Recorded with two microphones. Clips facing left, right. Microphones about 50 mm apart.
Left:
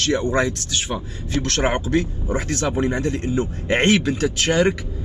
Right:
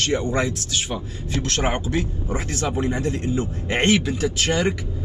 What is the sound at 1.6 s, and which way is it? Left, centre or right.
Speech, centre.